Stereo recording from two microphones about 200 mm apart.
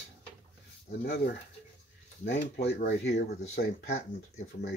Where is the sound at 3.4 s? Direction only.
35° left (ahead or behind).